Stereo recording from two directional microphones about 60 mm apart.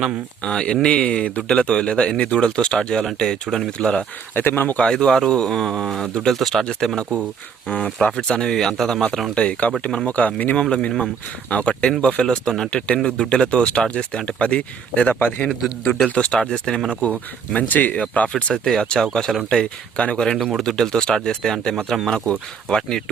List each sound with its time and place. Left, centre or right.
0.4 s speech: centre
4.4 s speech: left
4.8 s speech: centre
8.0 s speech: centre
9.3 s speech: left
16.4 s speech: centre
17.5 s speech: left
18.6 s speech: centre